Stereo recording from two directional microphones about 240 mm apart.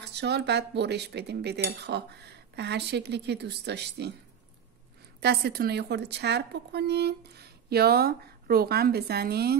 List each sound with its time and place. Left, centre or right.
0.0 s speech: right
5.2 s a woman's voice: right